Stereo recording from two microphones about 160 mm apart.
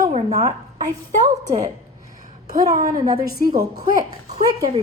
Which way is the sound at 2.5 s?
20° right (ahead or behind).